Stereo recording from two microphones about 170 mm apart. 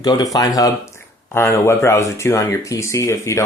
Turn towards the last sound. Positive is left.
turn(degrees=15)  # may be behind; listen again after turning